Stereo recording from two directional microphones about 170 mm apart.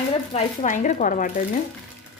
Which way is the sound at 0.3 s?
45° left (ahead or behind).